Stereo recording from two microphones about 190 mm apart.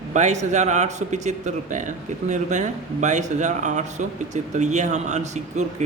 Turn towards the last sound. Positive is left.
turn(degrees=-35)  # may be behind; listen again after turning